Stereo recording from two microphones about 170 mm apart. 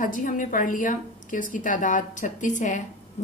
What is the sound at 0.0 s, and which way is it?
A woman's voice, 50° left (ahead or behind).